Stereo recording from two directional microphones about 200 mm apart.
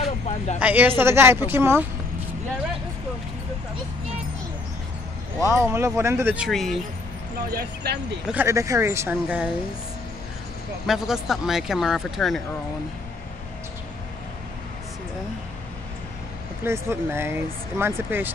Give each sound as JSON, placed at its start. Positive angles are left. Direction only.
{"t": 0.6, "sound": "speech", "side_deg": -10}
{"t": 5.5, "sound": "speech", "side_deg": -15}
{"t": 7.5, "sound": "speech", "side_deg": -55}
{"t": 8.3, "sound": "speech", "side_deg": -10}
{"t": 10.9, "sound": "speech", "side_deg": 0}
{"t": 16.6, "sound": "speech", "side_deg": -10}